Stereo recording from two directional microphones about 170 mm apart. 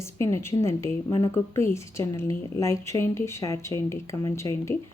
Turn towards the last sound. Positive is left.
turn(degrees=15)  # may be behind; listen again after turning